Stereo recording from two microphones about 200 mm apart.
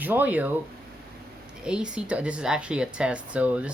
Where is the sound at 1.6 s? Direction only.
5° right (ahead or behind).